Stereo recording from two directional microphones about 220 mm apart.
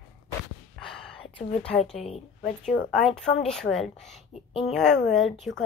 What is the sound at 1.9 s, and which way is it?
Speech, 30° left (ahead or behind).